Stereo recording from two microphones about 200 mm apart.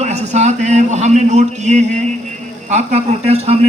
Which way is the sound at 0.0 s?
35° right (ahead or behind).